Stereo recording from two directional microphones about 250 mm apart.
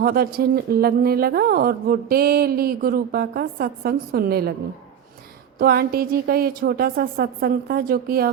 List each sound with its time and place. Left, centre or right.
0.0 s speech: right
5.5 s speech: right